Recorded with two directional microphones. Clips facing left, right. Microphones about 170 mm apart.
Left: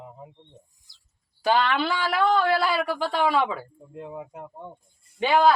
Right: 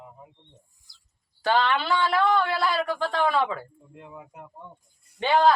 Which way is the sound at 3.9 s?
30° left (ahead or behind).